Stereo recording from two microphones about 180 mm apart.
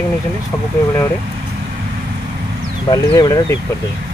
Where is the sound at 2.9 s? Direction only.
20° left (ahead or behind).